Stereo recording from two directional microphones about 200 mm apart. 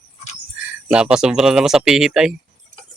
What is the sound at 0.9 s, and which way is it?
Speech, 5° right (ahead or behind).